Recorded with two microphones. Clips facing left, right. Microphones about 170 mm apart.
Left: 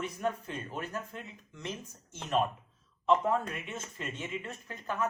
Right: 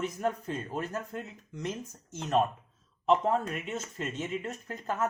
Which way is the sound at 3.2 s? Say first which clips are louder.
Right 2 dB; 40° right (ahead or behind).